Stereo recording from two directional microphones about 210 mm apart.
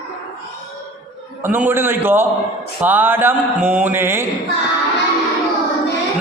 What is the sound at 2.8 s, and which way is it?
Speech, 10° right (ahead or behind).